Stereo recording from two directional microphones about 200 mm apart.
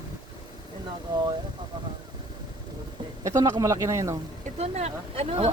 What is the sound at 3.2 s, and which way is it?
Speech, 20° right (ahead or behind).